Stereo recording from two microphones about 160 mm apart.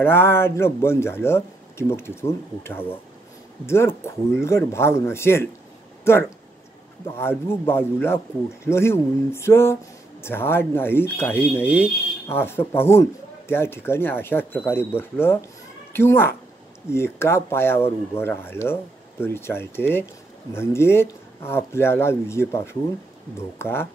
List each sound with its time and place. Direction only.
0.0 s speech: 15° left (ahead or behind)